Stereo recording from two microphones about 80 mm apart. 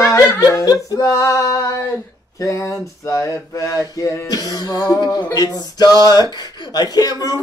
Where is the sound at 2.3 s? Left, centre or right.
Left.